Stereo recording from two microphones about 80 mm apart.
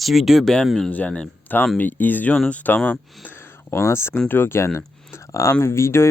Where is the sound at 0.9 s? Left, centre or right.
Centre.